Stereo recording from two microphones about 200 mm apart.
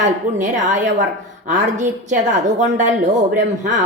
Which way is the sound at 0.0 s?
40° right (ahead or behind).